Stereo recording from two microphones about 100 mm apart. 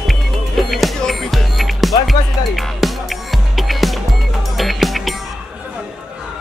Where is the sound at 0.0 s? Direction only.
Centre (ahead or behind).